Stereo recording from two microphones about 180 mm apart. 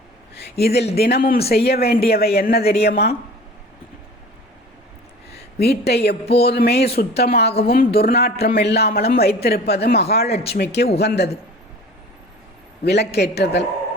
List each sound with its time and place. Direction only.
0.5 s a woman's voice: 65° left (ahead or behind)
5.3 s a woman's voice: 60° left (ahead or behind)
12.8 s a woman's voice: 65° left (ahead or behind)